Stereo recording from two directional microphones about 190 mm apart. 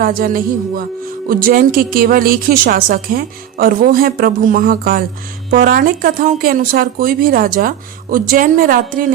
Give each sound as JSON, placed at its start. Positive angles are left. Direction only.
{"t": 0.0, "sound": "a woman's voice", "side_deg": -50}